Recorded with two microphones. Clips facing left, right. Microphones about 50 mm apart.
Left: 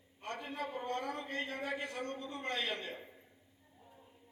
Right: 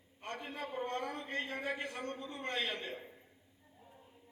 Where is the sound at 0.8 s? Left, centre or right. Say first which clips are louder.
Right 3 dB; right.